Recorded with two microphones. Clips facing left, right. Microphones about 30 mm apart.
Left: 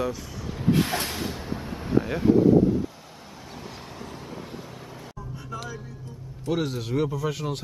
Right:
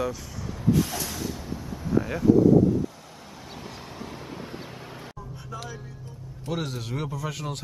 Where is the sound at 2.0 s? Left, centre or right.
Left.